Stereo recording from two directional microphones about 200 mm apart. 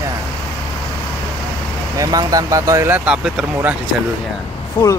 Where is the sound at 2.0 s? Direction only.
20° right (ahead or behind).